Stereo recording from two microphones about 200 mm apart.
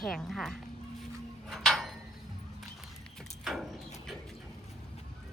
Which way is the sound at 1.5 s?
Centre (ahead or behind).